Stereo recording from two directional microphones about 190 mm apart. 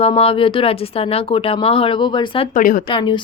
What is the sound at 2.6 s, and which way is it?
Speech, 45° left (ahead or behind).